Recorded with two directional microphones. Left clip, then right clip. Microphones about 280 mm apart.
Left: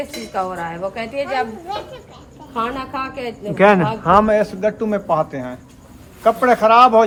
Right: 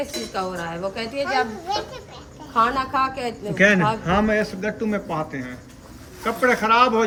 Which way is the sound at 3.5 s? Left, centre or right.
Centre.